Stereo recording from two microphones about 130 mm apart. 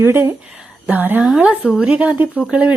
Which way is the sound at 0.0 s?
20° right (ahead or behind).